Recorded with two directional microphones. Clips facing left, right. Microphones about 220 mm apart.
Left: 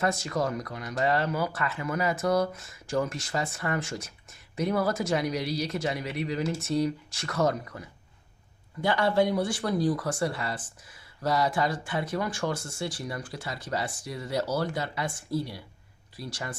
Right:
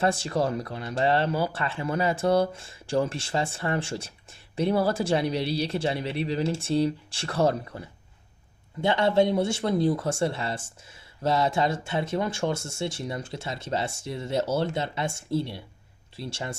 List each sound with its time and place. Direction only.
0.0 s speech: 30° right (ahead or behind)